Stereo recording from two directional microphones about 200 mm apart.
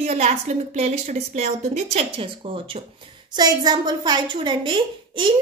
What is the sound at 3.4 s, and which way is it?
A woman's voice, 20° right (ahead or behind).